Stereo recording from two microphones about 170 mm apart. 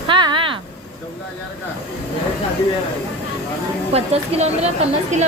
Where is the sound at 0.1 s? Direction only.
30° right (ahead or behind).